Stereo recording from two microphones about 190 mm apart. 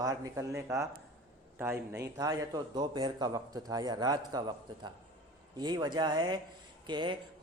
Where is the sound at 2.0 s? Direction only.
20° right (ahead or behind).